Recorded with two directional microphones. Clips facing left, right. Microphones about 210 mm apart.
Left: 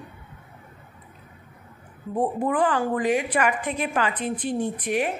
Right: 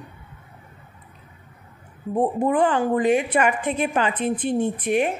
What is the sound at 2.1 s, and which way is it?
A woman's voice, 25° right (ahead or behind).